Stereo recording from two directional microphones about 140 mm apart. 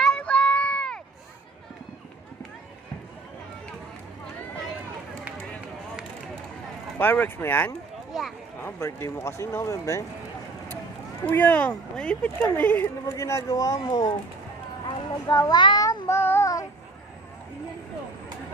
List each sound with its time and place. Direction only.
0.0 s run: 5° left (ahead or behind)
7.0 s speech: 15° left (ahead or behind)
8.1 s a sound: centre (ahead or behind)
8.6 s speech: 20° left (ahead or behind)
11.3 s speech: 10° left (ahead or behind); by 14.2 s 30° left (ahead or behind)
14.8 s child singing: 30° left (ahead or behind)